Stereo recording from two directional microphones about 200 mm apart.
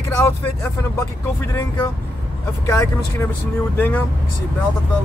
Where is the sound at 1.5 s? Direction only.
15° left (ahead or behind).